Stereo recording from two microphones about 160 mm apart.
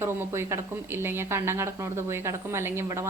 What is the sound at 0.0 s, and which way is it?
A woman's voice, 15° right (ahead or behind).